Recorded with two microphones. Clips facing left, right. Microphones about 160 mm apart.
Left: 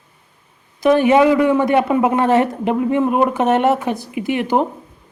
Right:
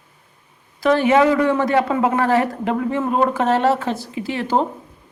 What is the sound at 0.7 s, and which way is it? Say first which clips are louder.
A man's voice: left 3 dB; 15° left (ahead or behind).